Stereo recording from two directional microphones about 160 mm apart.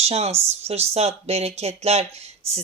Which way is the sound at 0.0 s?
40° right (ahead or behind).